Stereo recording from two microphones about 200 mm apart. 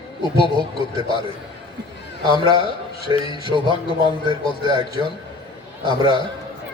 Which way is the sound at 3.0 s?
25° left (ahead or behind).